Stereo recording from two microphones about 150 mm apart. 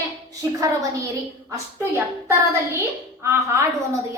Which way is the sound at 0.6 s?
20° right (ahead or behind).